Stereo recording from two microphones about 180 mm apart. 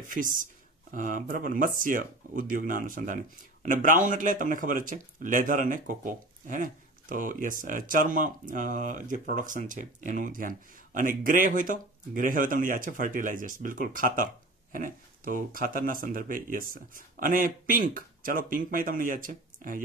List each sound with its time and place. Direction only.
0.0 s speech: 50° right (ahead or behind)